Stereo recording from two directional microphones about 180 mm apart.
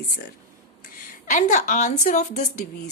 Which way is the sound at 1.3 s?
45° left (ahead or behind).